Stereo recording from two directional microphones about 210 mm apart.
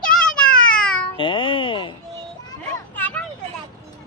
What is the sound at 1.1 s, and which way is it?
Music, 25° left (ahead or behind).